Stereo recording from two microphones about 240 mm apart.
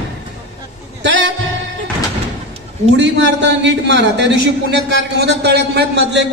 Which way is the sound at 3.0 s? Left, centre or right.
Right.